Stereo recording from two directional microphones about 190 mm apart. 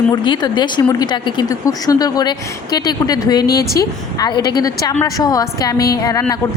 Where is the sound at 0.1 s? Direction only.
20° left (ahead or behind).